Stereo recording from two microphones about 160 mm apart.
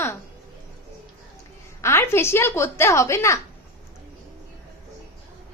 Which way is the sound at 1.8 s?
15° left (ahead or behind).